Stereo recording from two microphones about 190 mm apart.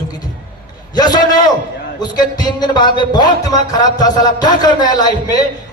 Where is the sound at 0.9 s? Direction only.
20° left (ahead or behind).